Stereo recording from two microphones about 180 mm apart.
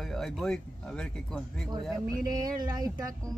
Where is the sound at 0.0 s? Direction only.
Centre (ahead or behind).